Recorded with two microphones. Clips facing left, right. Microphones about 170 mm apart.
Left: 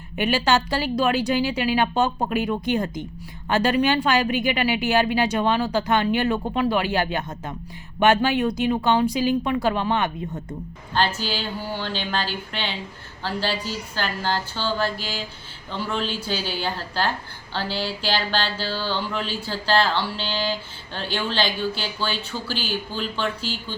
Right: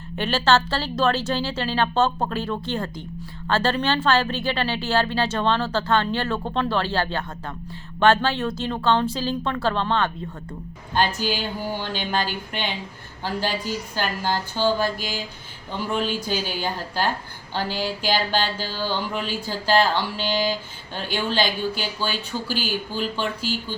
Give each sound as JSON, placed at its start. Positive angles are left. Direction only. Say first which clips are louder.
{"t": 0.2, "sound": "a woman's voice", "louder": "even", "side_deg": 15}
{"t": 11.3, "sound": "speech", "louder": "right 2 dB", "side_deg": -15}
{"t": 13.9, "sound": "speech", "louder": "even", "side_deg": -15}
{"t": 16.4, "sound": "a woman's voice", "louder": "even", "side_deg": -45}
{"t": 16.6, "sound": "speech", "louder": "even", "side_deg": -15}